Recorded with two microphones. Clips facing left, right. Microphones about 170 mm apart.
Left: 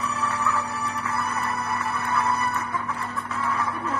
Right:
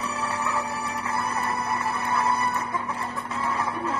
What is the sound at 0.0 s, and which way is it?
Music, 30° right (ahead or behind).